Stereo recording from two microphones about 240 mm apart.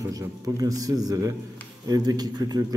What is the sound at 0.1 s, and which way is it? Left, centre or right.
A man's voice, centre.